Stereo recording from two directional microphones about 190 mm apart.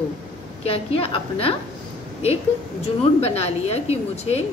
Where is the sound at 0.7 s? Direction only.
30° left (ahead or behind).